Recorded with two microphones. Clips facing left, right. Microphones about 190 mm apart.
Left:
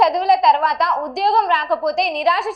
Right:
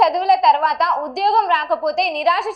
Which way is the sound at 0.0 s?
Centre (ahead or behind).